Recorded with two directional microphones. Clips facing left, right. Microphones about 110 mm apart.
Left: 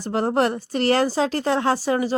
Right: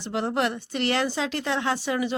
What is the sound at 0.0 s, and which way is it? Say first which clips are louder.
A woman's voice: left 5 dB; 40° left (ahead or behind).